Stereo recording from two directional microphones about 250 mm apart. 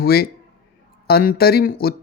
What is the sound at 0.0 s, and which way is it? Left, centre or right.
Speech, left.